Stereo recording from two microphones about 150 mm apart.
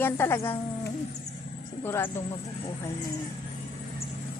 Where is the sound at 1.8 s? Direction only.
15° left (ahead or behind).